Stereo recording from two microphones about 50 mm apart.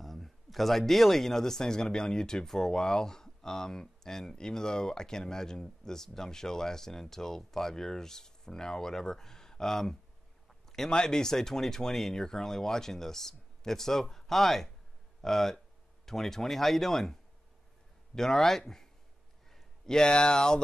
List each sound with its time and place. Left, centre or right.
0.0 s speech: centre